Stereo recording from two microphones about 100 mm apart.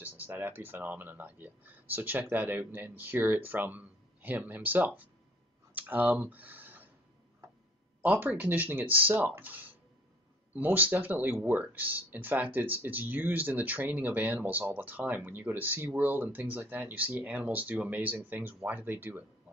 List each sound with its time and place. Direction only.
0.2 s speech: 20° right (ahead or behind)
8.0 s speech: 20° right (ahead or behind)